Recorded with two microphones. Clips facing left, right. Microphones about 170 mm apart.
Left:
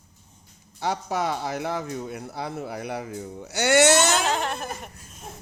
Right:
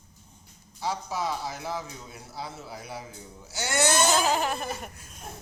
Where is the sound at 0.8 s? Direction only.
65° left (ahead or behind); by 4.2 s 80° left.